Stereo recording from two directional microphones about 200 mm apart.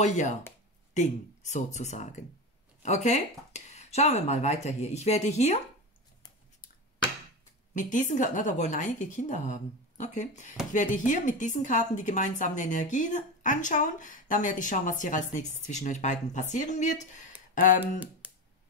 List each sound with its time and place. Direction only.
0.0 s speech: 35° left (ahead or behind)
7.7 s speech: 40° left (ahead or behind)
17.7 s speech: 5° right (ahead or behind)